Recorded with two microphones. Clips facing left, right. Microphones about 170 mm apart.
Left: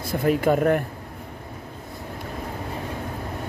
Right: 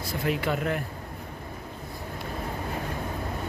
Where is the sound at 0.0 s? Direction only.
50° left (ahead or behind).